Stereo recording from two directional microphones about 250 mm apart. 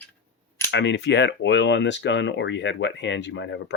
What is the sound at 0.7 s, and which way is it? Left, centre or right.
Speech, left.